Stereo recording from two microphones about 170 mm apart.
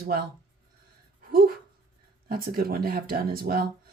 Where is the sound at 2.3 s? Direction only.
60° right (ahead or behind).